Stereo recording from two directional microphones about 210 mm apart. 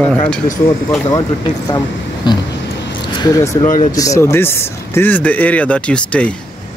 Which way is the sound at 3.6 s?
40° left (ahead or behind).